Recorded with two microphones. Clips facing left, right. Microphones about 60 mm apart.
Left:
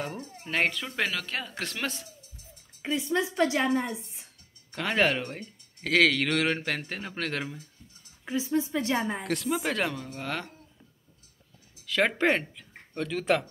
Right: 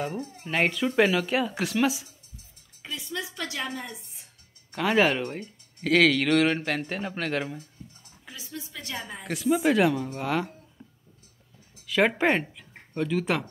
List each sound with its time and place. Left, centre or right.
0.4 s speech: centre
2.8 s a woman's voice: left
4.7 s speech: centre
7.8 s a sound: centre
8.3 s a woman's voice: left
9.2 s speech: centre
11.8 s speech: centre